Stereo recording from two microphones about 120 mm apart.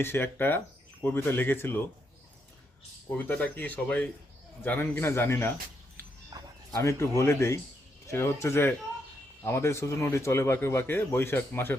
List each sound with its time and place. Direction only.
0.0 s speech: 20° left (ahead or behind)
3.1 s speech: 10° left (ahead or behind)
6.3 s a sound: 35° right (ahead or behind)
6.7 s speech: 25° left (ahead or behind)